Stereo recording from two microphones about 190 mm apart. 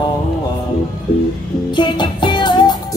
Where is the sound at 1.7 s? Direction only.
25° left (ahead or behind).